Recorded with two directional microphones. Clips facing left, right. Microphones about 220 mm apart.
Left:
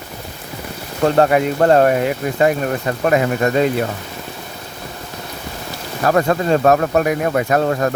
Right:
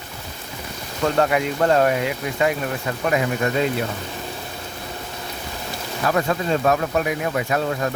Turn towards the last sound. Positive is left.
turn(degrees=50)  # may be behind; listen again after turning